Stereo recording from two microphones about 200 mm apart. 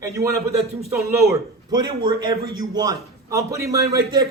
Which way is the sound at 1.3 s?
20° right (ahead or behind).